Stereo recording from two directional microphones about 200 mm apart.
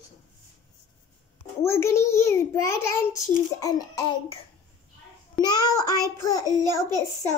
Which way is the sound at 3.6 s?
20° left (ahead or behind).